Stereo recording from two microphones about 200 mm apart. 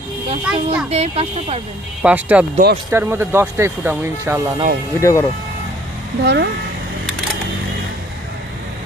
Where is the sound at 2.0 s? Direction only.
10° right (ahead or behind).